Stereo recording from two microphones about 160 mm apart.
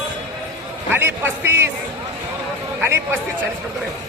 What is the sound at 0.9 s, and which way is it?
Speech, 15° right (ahead or behind).